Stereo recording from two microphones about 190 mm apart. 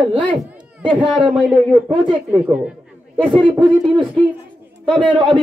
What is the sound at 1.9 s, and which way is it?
Speech, 25° right (ahead or behind).